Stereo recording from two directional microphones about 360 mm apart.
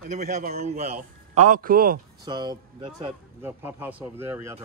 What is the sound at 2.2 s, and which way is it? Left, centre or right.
Speech, centre.